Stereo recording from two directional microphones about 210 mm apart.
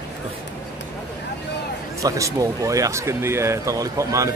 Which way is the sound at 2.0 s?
15° right (ahead or behind).